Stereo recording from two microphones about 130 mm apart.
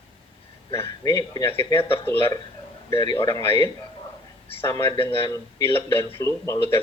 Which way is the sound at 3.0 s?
30° left (ahead or behind).